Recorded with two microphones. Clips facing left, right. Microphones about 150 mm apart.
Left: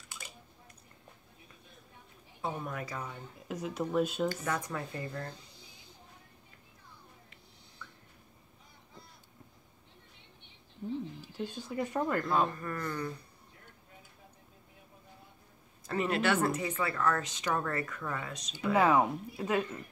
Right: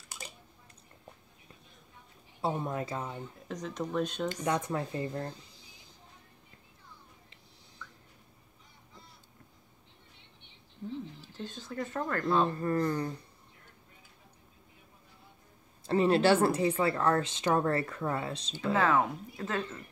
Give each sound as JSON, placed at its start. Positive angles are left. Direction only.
{"t": 2.4, "sound": "speech", "side_deg": -25}
{"t": 3.4, "sound": "speech", "side_deg": 10}
{"t": 4.5, "sound": "speech", "side_deg": -25}
{"t": 11.1, "sound": "speech", "side_deg": 10}
{"t": 12.4, "sound": "speech", "side_deg": -30}
{"t": 15.9, "sound": "speech", "side_deg": -30}
{"t": 18.5, "sound": "speech", "side_deg": 15}